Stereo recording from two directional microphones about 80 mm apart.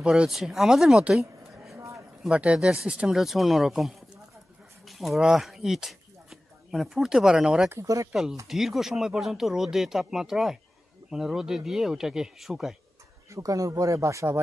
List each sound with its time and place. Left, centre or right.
0.0 s speech: centre
2.2 s speech: centre
7.8 s speech: right
8.1 s speech: centre
13.3 s speech: right